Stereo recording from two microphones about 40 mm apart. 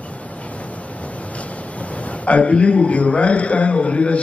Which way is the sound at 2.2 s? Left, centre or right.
Left.